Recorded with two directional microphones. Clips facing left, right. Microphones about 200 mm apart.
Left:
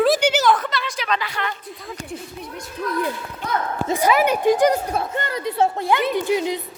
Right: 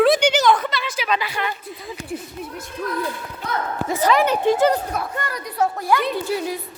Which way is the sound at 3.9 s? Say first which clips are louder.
Even; 10° left (ahead or behind).